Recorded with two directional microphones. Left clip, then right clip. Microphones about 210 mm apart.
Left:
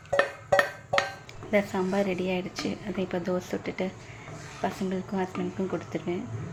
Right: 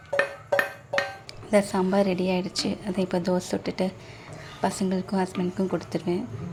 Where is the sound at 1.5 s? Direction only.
25° right (ahead or behind).